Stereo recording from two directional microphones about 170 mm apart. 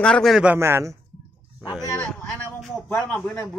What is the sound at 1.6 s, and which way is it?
Speech, 20° left (ahead or behind).